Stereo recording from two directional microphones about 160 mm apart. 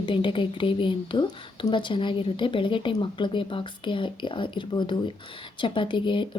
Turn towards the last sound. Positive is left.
turn(degrees=30)  # may be behind; listen again after turning